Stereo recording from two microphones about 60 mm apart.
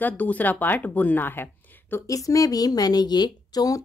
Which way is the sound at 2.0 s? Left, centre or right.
Left.